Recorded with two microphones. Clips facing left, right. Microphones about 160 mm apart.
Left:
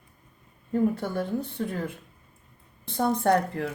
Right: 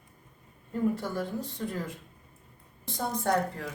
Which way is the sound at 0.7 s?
60° left (ahead or behind).